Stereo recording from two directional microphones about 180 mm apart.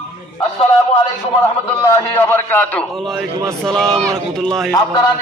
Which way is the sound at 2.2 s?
10° left (ahead or behind).